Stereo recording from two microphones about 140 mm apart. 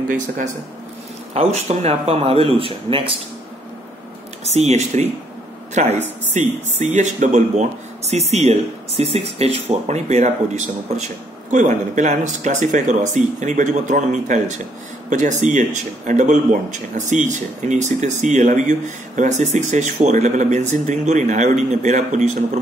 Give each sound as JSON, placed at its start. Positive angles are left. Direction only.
{"t": 0.1, "sound": "speech", "side_deg": -65}
{"t": 1.3, "sound": "speech", "side_deg": -50}
{"t": 4.5, "sound": "speech", "side_deg": -50}